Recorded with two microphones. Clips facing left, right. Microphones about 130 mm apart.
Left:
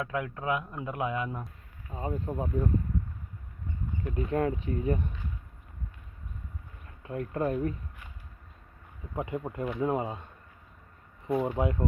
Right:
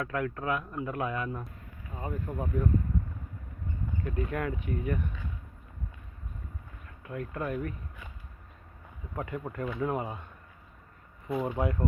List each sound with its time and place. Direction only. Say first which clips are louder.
0.0 s speech: even; 15° left (ahead or behind)
4.0 s speech: left 5 dB; 25° left (ahead or behind)
6.8 s speech: left 3 dB; 30° left (ahead or behind)
9.1 s speech: left 2 dB; 20° left (ahead or behind)
11.3 s speech: left 1 dB; 20° left (ahead or behind)